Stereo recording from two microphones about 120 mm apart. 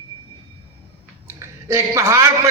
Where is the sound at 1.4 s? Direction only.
20° right (ahead or behind).